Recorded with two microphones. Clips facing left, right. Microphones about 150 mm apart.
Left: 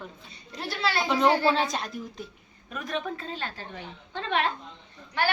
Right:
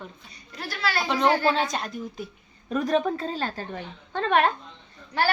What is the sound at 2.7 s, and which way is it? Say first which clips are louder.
A woman's voice: right 9 dB; 35° right (ahead or behind).